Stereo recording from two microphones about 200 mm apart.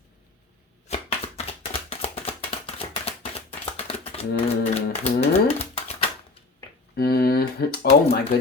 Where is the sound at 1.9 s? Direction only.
30° left (ahead or behind).